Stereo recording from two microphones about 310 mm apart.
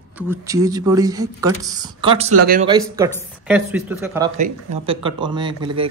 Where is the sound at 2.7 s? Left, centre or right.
Centre.